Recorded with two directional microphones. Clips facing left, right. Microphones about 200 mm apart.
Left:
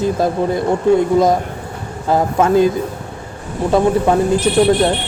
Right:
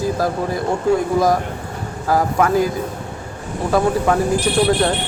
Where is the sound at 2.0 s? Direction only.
25° left (ahead or behind).